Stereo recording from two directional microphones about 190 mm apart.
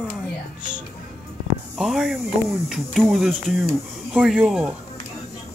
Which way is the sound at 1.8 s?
Centre (ahead or behind).